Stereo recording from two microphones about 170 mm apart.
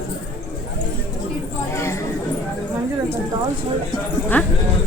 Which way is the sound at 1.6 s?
15° left (ahead or behind).